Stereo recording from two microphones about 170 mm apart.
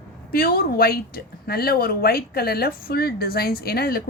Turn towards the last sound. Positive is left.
turn(degrees=60)  # may be behind; listen again after turning